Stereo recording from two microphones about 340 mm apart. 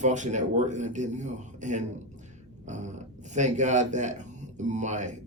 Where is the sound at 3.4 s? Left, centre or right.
Right.